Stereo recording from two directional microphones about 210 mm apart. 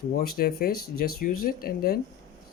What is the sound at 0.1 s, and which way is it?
Speech, 45° left (ahead or behind).